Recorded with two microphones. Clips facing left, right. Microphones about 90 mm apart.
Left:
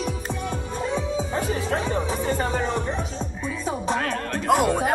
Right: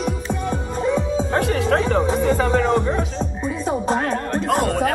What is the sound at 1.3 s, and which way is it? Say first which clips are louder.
Music: right 8 dB; 90° right.